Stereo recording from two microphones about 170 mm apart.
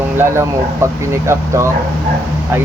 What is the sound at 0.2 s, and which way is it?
Speech, 15° right (ahead or behind).